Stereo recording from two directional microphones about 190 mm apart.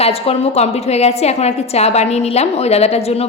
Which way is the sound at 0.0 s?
30° left (ahead or behind).